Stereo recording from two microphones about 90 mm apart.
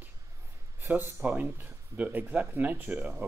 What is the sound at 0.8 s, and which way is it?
Speech, 20° right (ahead or behind).